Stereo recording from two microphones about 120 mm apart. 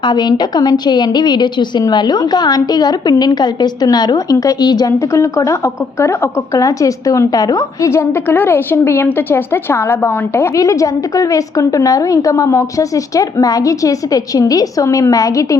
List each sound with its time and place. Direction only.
0.0 s a woman's voice: 35° left (ahead or behind)